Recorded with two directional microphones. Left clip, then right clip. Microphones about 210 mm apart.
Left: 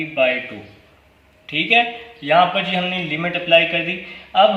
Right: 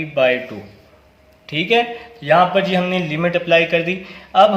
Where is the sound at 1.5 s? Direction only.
45° right (ahead or behind).